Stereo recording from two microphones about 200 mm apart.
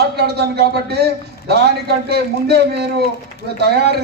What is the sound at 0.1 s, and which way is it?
A man's voice, 55° right (ahead or behind).